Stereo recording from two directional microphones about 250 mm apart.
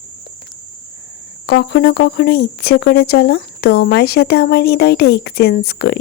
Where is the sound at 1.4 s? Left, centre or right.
Left.